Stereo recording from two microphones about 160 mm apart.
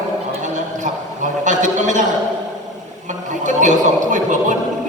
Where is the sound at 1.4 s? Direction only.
50° right (ahead or behind).